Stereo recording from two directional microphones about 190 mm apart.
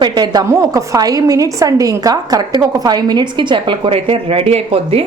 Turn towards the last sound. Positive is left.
turn(degrees=-30)  # may be behind; listen again after turning